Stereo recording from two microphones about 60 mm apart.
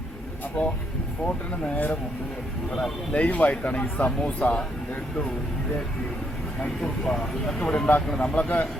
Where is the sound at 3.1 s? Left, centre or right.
Left.